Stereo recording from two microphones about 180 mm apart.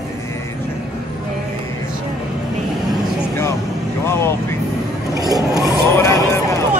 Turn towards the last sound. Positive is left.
turn(degrees=15)  # may be behind; listen again after turning